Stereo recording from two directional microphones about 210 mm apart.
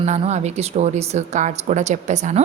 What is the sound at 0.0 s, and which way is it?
A woman's voice, 35° right (ahead or behind).